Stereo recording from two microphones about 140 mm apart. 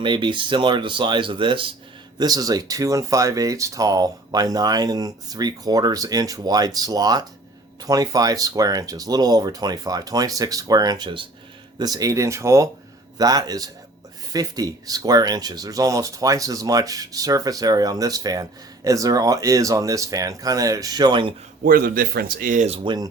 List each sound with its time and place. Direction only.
0.0 s speech: 35° right (ahead or behind)
21.6 s speech: 90° right
22.8 s speech: 35° right (ahead or behind)